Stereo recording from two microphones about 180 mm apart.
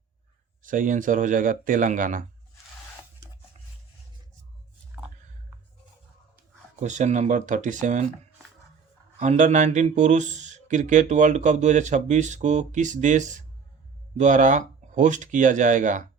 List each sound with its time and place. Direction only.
0.6 s speech: 50° right (ahead or behind)
6.7 s speech: 40° right (ahead or behind)
9.1 s speech: 40° right (ahead or behind)